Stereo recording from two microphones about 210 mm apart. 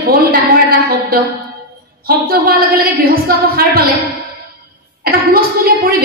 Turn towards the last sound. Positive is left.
turn(degrees=-45)  # may be behind; listen again after turning